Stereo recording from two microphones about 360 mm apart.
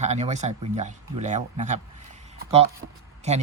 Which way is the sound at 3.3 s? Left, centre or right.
Centre.